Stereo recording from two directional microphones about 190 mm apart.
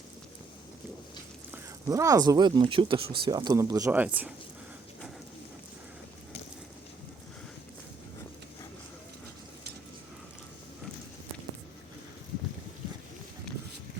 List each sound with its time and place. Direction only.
1.9 s speech: 15° right (ahead or behind)